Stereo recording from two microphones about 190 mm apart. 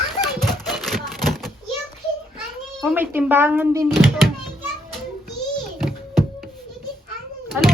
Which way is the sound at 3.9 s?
Centre (ahead or behind).